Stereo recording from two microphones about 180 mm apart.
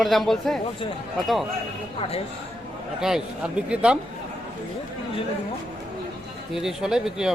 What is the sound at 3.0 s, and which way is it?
Speech, 5° right (ahead or behind).